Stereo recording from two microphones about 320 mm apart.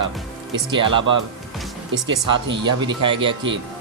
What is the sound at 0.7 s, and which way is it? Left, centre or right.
Speech, centre.